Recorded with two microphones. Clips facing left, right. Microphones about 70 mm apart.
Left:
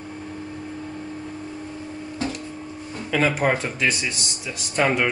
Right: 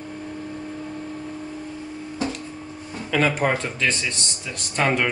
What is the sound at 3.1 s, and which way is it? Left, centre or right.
Speech, centre.